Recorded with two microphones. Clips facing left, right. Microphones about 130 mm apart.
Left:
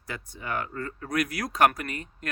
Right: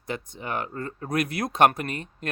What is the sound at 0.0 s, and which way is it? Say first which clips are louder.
Speech: right 5 dB; 20° right (ahead or behind).